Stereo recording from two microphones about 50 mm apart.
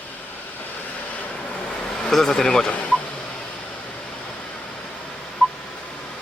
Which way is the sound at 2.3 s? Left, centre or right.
Centre.